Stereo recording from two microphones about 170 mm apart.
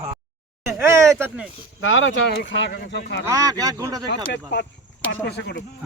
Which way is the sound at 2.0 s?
90° left.